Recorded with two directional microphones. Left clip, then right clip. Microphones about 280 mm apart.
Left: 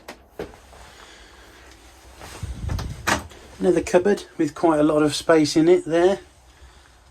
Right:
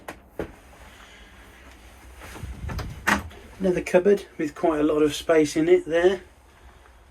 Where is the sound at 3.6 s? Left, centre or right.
Centre.